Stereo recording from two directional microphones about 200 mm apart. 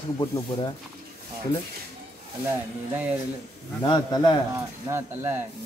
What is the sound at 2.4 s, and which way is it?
Speech, 10° right (ahead or behind).